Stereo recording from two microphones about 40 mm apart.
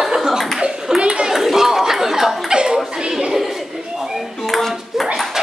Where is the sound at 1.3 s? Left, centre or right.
Centre.